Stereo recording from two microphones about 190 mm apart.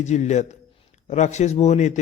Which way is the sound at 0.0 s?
40° left (ahead or behind).